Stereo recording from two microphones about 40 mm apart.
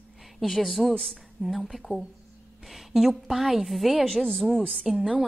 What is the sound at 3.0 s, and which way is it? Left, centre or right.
A woman's voice, centre.